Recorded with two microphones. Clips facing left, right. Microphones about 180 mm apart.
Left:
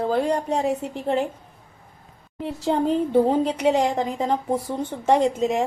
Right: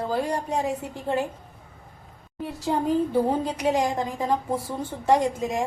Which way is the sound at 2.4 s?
25° left (ahead or behind).